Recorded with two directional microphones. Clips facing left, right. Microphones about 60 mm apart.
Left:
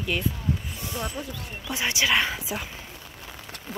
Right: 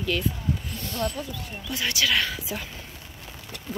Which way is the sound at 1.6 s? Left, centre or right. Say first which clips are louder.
Left 1 dB; left.